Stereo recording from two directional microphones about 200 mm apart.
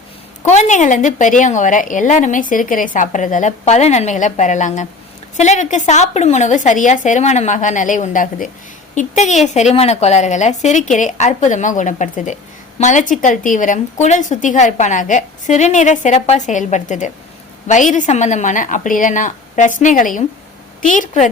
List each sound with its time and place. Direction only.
0.5 s a woman's voice: 35° left (ahead or behind)